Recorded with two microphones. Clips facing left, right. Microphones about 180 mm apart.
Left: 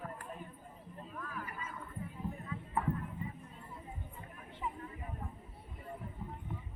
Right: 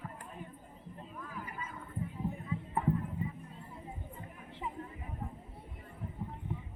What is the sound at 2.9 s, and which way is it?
Clip-clop, centre (ahead or behind).